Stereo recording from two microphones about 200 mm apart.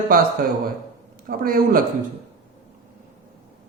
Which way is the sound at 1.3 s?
45° right (ahead or behind).